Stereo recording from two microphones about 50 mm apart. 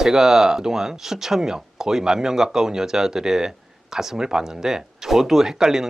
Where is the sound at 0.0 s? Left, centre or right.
Centre.